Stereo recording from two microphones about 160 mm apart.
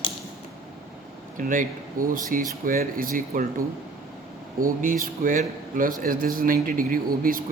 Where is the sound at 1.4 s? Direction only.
60° right (ahead or behind).